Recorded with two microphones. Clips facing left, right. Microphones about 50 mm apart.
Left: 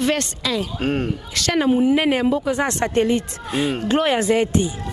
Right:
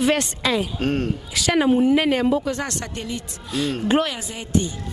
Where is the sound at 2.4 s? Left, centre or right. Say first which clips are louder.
Left 5 dB; centre.